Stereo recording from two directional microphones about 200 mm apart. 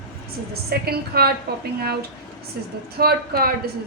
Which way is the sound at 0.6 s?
50° right (ahead or behind).